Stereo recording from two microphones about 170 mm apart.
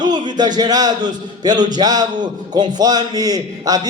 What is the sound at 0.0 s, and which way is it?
A man's voice, 25° right (ahead or behind).